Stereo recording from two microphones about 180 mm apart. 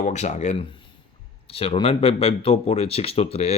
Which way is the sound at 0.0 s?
40° left (ahead or behind).